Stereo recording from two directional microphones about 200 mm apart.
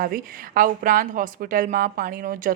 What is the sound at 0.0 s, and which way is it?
A woman's voice, 45° right (ahead or behind).